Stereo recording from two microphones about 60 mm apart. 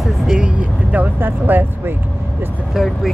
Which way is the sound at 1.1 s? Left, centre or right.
Right.